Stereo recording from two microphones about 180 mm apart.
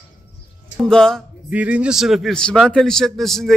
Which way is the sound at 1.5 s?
5° right (ahead or behind).